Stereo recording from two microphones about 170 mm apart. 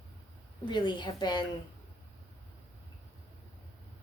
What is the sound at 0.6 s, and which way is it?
Speech, 25° left (ahead or behind).